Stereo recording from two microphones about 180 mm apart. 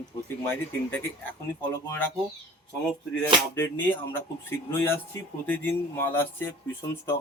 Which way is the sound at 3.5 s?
15° left (ahead or behind).